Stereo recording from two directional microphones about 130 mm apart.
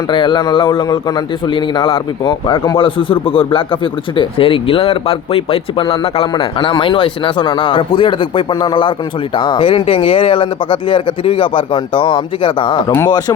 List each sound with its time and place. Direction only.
0.1 s a man's voice: 40° left (ahead or behind)